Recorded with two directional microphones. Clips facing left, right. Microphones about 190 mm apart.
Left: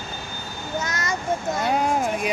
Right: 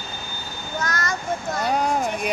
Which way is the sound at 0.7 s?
20° left (ahead or behind).